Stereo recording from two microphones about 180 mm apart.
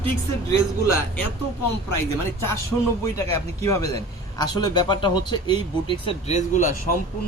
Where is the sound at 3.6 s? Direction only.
15° left (ahead or behind); by 6.7 s 40° left (ahead or behind).